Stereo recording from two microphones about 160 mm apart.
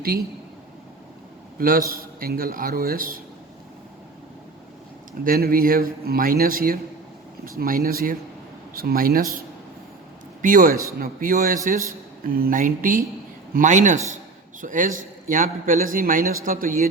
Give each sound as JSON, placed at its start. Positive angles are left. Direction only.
{"t": 1.5, "sound": "a man's voice", "side_deg": -65}
{"t": 5.2, "sound": "speech", "side_deg": -65}
{"t": 10.4, "sound": "a man's voice", "side_deg": -60}